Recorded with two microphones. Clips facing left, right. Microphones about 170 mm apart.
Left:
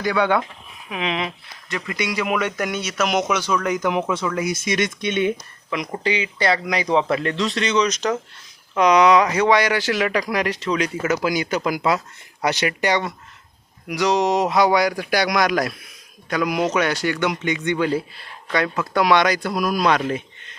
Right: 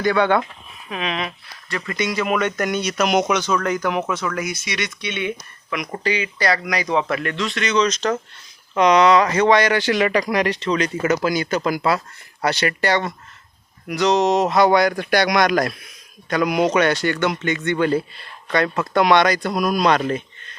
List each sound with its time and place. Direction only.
0.0 s a man's voice: 10° left (ahead or behind)
4.5 s speech: 45° left (ahead or behind)
6.0 s a man's voice: 20° left (ahead or behind)
7.8 s speech: 15° left (ahead or behind)